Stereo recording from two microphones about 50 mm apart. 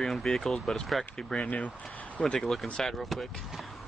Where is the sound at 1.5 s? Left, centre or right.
Left.